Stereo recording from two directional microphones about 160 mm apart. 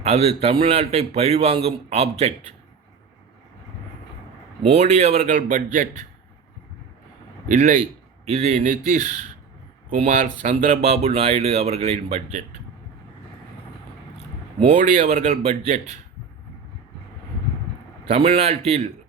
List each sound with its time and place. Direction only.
0.0 s a man's voice: 40° right (ahead or behind)
4.6 s speech: 45° right (ahead or behind)
7.4 s a man's voice: 55° right (ahead or behind)
8.2 s speech: 40° right (ahead or behind)
8.6 s speech: 55° right (ahead or behind)
9.9 s a man's voice: 45° right (ahead or behind)
14.8 s speech: 50° right (ahead or behind)
18.1 s a man's voice: 40° right (ahead or behind)